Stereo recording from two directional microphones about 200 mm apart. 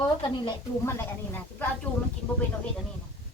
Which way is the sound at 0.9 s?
10° left (ahead or behind).